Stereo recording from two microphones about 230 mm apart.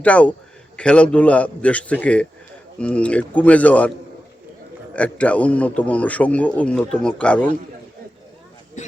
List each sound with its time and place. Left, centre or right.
0.0 s a man's voice: centre
4.9 s a man's voice: centre
8.8 s speech: left